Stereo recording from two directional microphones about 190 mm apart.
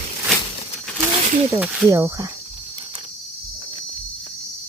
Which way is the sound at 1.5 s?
15° right (ahead or behind).